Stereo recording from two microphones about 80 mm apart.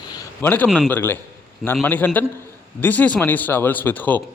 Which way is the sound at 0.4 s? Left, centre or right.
Left.